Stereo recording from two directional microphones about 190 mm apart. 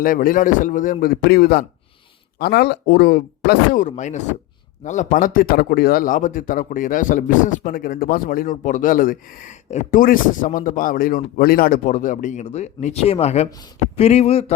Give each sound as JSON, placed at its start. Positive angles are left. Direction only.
{"t": 0.0, "sound": "speech", "side_deg": 50}